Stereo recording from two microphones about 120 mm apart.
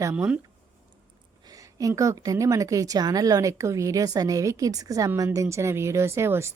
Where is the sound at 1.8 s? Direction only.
25° right (ahead or behind).